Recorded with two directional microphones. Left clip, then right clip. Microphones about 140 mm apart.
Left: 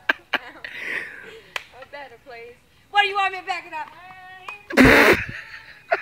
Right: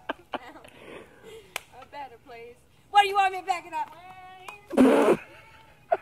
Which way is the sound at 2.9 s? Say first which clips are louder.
Left 1 dB; 20° right (ahead or behind).